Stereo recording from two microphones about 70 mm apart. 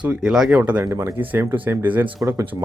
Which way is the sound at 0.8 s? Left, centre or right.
Right.